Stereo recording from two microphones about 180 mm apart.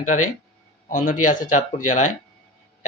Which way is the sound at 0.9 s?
45° left (ahead or behind).